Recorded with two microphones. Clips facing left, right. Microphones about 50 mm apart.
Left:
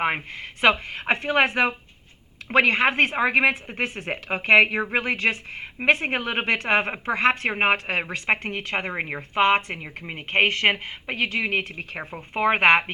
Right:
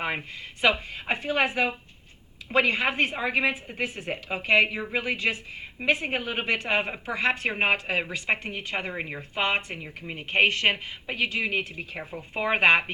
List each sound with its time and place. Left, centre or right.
0.0 s a woman's voice: left
9.3 s a woman's voice: left
9.8 s a woman's voice: left